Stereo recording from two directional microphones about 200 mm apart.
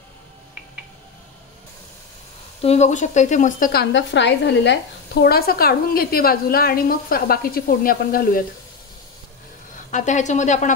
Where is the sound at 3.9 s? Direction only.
65° left (ahead or behind); by 8.4 s 45° left (ahead or behind).